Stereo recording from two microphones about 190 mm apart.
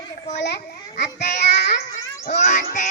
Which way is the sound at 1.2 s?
55° left (ahead or behind).